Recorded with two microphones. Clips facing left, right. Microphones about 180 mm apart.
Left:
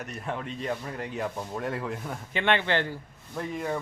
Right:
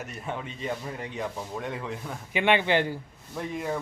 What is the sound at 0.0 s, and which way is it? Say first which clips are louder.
Speech: left 1 dB; centre (ahead or behind).